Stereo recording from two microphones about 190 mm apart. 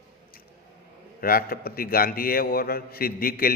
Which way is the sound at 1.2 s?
50° left (ahead or behind).